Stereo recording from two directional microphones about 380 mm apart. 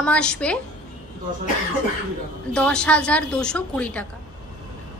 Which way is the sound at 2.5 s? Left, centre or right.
Centre.